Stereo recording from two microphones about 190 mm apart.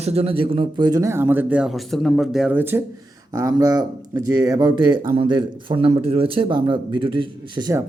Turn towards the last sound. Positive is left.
turn(degrees=-20)  # may be behind; listen again after turning